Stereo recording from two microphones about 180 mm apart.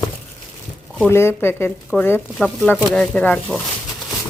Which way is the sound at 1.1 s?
15° left (ahead or behind).